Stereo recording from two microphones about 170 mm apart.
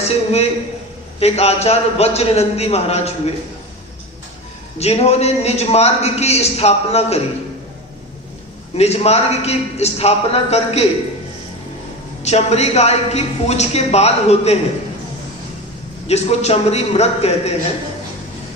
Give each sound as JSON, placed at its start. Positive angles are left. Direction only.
{"t": 0.0, "sound": "a man's voice", "side_deg": 40}
{"t": 4.8, "sound": "a man's voice", "side_deg": 40}
{"t": 8.7, "sound": "a man's voice", "side_deg": 40}
{"t": 12.2, "sound": "a man's voice", "side_deg": 40}
{"t": 16.0, "sound": "a man's voice", "side_deg": 40}